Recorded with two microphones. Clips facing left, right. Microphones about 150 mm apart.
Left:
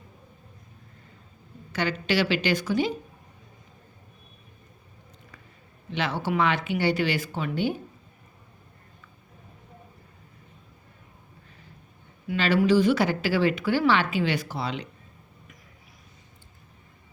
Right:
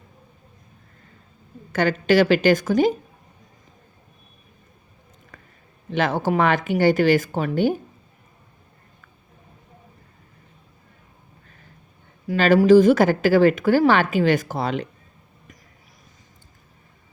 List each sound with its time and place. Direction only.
1.7 s a woman's voice: 50° right (ahead or behind)
5.9 s a woman's voice: 45° right (ahead or behind)
12.3 s a woman's voice: 40° right (ahead or behind)